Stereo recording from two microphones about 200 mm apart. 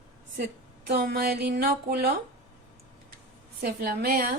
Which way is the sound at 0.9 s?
50° right (ahead or behind).